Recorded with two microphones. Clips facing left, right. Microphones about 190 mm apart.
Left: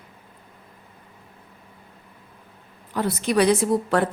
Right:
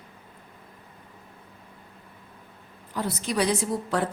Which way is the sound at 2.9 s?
65° left (ahead or behind).